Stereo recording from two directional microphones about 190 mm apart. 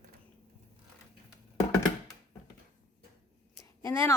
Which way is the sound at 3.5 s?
15° left (ahead or behind).